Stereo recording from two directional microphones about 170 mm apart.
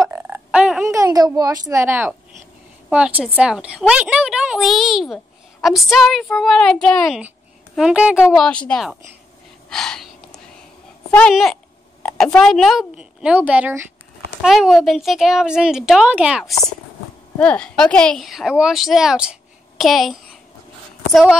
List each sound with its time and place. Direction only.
0.1 s a sound: 10° right (ahead or behind)
0.8 s a child's voice: 20° right (ahead or behind); by 8.9 s 5° left (ahead or behind)
9.7 s gasp: 5° left (ahead or behind)
11.1 s a child's voice: 10° left (ahead or behind)
17.4 s a child's voice: 5° left (ahead or behind)